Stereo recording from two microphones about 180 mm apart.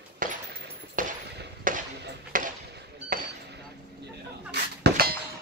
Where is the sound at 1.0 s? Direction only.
50° right (ahead or behind).